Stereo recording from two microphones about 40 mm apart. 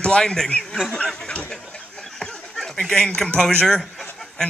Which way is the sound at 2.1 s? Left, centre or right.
Centre.